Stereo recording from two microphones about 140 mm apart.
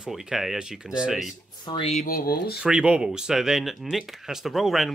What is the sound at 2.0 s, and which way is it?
Speech, 90° left.